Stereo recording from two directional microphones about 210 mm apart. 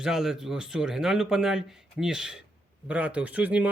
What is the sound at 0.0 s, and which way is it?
Speech, centre (ahead or behind).